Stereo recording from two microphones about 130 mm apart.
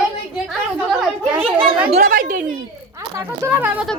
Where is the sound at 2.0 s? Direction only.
80° right.